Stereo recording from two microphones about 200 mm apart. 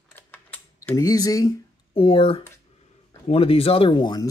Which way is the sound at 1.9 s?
30° left (ahead or behind).